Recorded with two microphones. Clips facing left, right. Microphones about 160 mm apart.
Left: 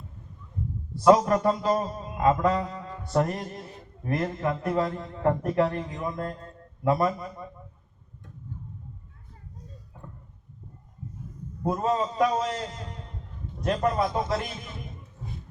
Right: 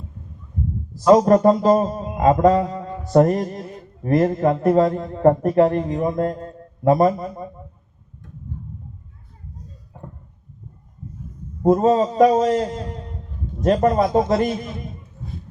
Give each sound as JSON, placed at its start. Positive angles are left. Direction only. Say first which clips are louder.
{"t": 1.1, "sound": "speech", "louder": "right 11 dB", "side_deg": -35}
{"t": 2.0, "sound": "mantra", "louder": "right 7 dB", "side_deg": -45}
{"t": 4.9, "sound": "speech", "louder": "right 10 dB", "side_deg": -45}
{"t": 11.6, "sound": "speech", "louder": "right 10 dB", "side_deg": -35}
{"t": 12.1, "sound": "a man's voice", "louder": "right 10 dB", "side_deg": -50}